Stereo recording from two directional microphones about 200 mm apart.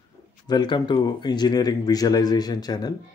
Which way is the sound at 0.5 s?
20° left (ahead or behind).